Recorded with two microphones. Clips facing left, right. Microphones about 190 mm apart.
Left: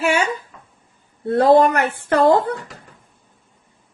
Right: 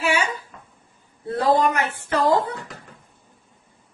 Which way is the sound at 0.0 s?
50° left (ahead or behind).